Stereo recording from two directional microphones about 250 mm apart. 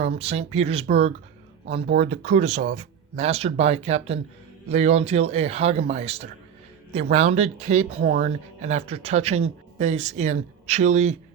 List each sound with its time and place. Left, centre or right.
0.0 s speech: right
1.9 s speech: right